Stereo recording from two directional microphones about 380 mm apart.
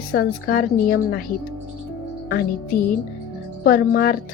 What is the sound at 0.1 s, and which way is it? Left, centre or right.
A woman's voice, left.